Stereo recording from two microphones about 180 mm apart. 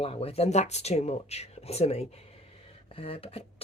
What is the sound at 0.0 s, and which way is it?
Speech, 35° left (ahead or behind).